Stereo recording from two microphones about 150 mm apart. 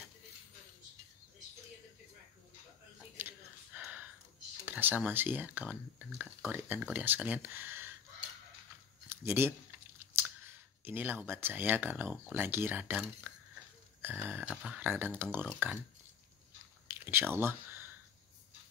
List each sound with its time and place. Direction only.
3.2 s a sound: 10° right (ahead or behind)
4.6 s speech: 15° right (ahead or behind)
9.1 s speech: 15° right (ahead or behind)
16.8 s speech: 15° right (ahead or behind)